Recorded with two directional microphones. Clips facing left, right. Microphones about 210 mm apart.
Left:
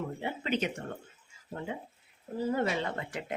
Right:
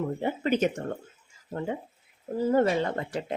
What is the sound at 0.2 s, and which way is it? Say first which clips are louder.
Speech: right 7 dB; 45° right (ahead or behind).